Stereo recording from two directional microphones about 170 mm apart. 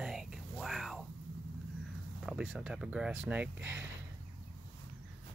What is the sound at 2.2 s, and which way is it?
Speech, 5° right (ahead or behind).